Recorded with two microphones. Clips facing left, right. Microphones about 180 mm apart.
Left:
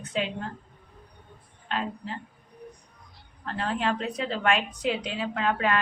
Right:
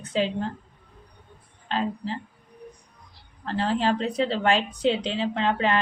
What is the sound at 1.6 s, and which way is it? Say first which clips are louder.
Speech: right 4 dB; 30° right (ahead or behind).